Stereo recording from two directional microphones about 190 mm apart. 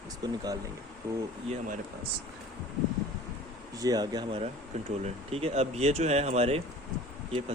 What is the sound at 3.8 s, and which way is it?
Speech, 20° right (ahead or behind).